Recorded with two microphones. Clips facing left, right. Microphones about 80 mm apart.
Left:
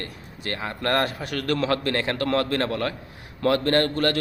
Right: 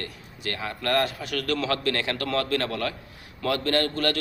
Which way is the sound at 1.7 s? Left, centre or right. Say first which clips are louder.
Left 2 dB; left.